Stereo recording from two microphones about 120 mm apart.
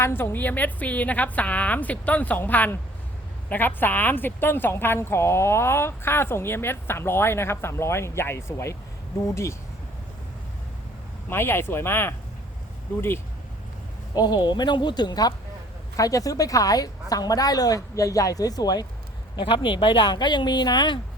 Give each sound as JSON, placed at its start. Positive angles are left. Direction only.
{"t": 0.0, "sound": "a woman's voice", "side_deg": 20}
{"t": 11.3, "sound": "speech", "side_deg": 20}
{"t": 14.1, "sound": "a woman's voice", "side_deg": 35}